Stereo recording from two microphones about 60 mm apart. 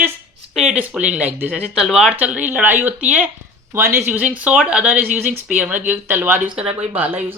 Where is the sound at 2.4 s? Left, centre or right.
Right.